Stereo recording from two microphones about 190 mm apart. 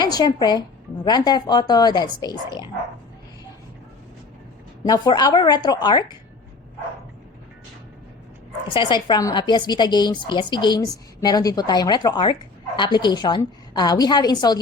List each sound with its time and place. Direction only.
0.0 s a woman's voice: 20° left (ahead or behind)
4.8 s a woman's voice: 20° left (ahead or behind)
8.7 s a woman's voice: 25° left (ahead or behind)